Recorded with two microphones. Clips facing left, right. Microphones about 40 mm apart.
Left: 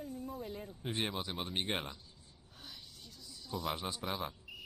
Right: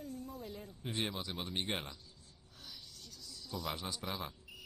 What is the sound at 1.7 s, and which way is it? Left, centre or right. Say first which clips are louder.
Speech: left 2 dB; centre.